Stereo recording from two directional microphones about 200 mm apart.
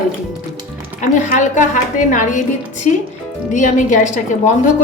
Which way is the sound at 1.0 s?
40° left (ahead or behind).